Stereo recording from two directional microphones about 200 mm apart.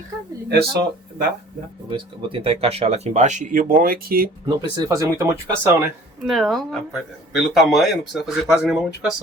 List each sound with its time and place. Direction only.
0.4 s speech: 50° right (ahead or behind)
1.9 s speech: 25° right (ahead or behind); by 4.3 s 45° right (ahead or behind)
4.4 s speech: 15° right (ahead or behind)
6.2 s speech: centre (ahead or behind)